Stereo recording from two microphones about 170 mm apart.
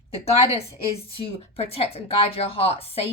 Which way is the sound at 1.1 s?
35° left (ahead or behind).